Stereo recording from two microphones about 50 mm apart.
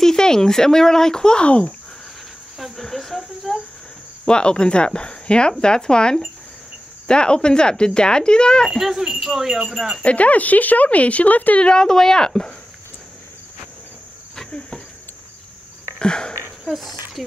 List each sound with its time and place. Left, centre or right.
0.0 s speech: centre
2.6 s cricket: centre
4.3 s speech: centre
8.7 s speech: centre
10.0 s speech: left
11.6 s speech: centre
16.0 s speech: centre
16.6 s speech: centre